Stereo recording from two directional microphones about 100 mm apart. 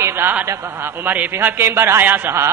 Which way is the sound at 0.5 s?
25° right (ahead or behind).